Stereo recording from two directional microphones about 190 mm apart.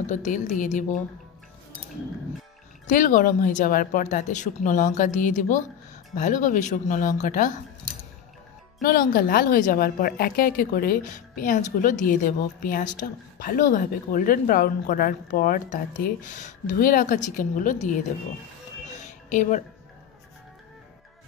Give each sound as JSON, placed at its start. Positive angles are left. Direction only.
{"t": 0.0, "sound": "a woman's voice", "side_deg": 40}
{"t": 2.9, "sound": "a woman's voice", "side_deg": 45}
{"t": 8.8, "sound": "a woman's voice", "side_deg": 50}
{"t": 18.9, "sound": "a sound", "side_deg": 40}